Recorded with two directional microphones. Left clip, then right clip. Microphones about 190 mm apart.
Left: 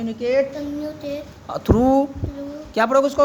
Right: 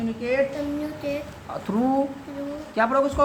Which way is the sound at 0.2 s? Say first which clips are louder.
Left 5 dB; 55° left (ahead or behind).